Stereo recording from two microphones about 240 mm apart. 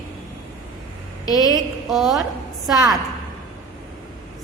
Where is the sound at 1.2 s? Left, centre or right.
Centre.